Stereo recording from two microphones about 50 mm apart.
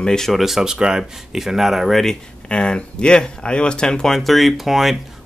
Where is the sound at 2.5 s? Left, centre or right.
Centre.